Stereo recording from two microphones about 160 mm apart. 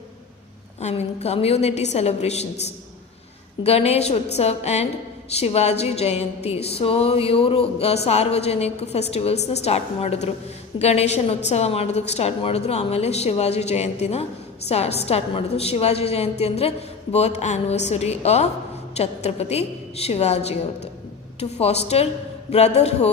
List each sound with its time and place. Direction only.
0.8 s a woman's voice: 45° left (ahead or behind)
3.6 s a woman's voice: 40° left (ahead or behind)